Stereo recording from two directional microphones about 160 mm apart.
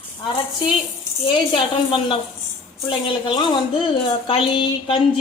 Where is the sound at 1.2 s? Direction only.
30° left (ahead or behind).